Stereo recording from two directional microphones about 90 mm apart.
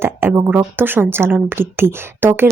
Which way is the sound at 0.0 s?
25° right (ahead or behind).